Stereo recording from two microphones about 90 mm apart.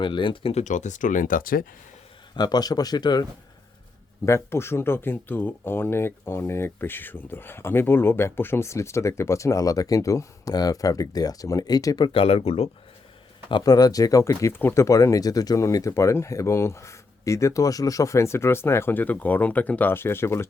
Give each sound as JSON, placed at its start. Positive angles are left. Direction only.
{"t": 0.0, "sound": "speech", "side_deg": 65}
{"t": 2.3, "sound": "speech", "side_deg": 50}
{"t": 4.3, "sound": "speech", "side_deg": 30}
{"t": 12.0, "sound": "speech", "side_deg": 90}
{"t": 13.7, "sound": "speech", "side_deg": 45}
{"t": 14.5, "sound": "speech", "side_deg": 25}